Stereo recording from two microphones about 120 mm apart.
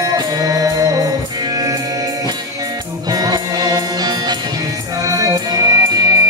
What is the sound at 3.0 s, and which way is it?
Music, 35° right (ahead or behind).